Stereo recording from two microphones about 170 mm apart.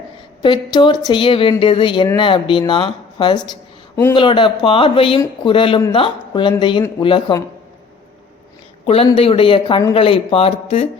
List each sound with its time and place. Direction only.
0.4 s speech: 30° left (ahead or behind)
9.1 s speech: 35° left (ahead or behind)